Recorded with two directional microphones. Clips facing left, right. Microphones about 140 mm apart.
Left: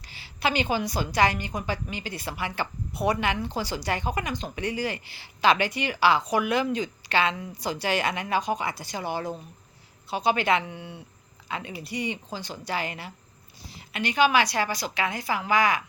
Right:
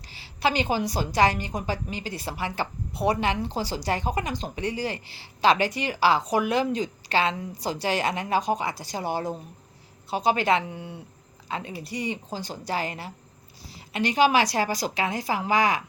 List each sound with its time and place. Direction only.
0.1 s a woman's voice: 35° right (ahead or behind)